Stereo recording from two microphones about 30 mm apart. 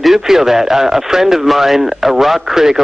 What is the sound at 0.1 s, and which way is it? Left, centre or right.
Speech, centre.